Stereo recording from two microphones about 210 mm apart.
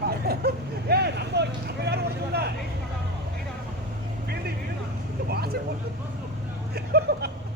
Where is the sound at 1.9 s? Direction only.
50° right (ahead or behind).